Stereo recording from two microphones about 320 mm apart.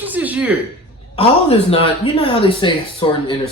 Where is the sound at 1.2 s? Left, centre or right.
Centre.